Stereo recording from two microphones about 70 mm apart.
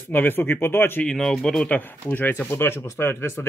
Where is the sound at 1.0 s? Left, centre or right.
Centre.